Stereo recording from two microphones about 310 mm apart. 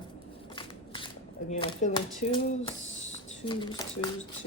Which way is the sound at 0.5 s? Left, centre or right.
Centre.